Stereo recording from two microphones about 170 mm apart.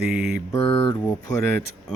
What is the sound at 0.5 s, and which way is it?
Speech, 15° left (ahead or behind).